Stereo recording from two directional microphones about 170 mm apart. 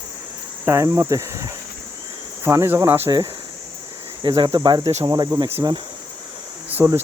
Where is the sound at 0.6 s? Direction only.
15° right (ahead or behind).